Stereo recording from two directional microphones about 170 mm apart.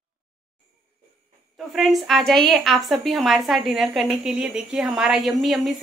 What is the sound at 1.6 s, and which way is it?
A woman's voice, centre (ahead or behind).